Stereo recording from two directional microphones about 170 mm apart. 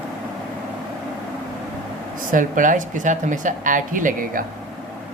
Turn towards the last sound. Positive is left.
turn(degrees=-50)  # may be behind; listen again after turning